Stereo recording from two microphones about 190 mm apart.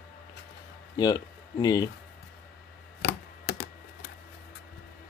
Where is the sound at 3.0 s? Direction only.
55° left (ahead or behind).